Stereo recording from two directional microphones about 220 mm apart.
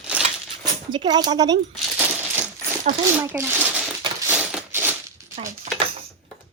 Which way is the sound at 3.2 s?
10° right (ahead or behind).